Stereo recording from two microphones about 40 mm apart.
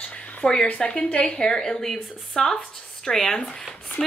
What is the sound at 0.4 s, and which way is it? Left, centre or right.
A woman's voice, centre.